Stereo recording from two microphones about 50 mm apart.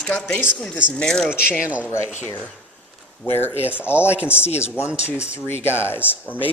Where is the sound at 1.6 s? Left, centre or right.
Right.